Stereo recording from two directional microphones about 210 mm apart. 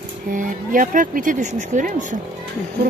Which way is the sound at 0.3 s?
40° right (ahead or behind).